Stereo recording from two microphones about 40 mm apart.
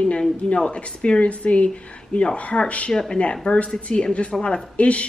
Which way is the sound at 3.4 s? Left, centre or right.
Left.